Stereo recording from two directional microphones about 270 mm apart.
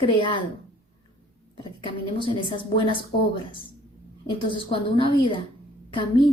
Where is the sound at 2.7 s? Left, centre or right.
Centre.